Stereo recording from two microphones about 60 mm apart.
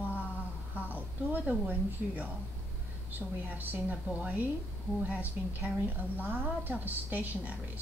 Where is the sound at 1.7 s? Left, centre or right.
Right.